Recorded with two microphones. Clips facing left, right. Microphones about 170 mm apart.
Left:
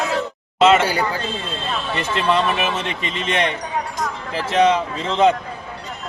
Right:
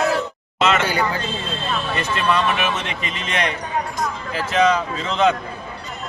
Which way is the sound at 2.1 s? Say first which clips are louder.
Left 2 dB; 30° left (ahead or behind).